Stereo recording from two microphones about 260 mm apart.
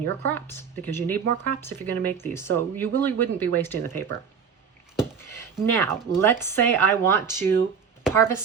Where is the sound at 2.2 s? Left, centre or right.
Centre.